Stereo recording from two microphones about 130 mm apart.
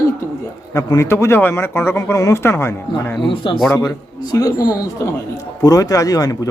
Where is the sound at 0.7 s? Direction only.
25° left (ahead or behind).